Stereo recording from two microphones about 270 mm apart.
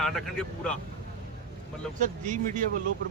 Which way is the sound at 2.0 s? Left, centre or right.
Right.